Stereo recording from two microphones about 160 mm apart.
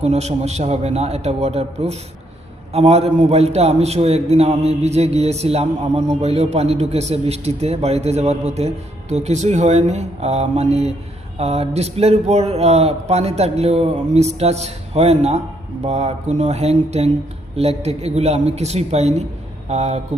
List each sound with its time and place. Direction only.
0.0 s a man's voice: 45° right (ahead or behind)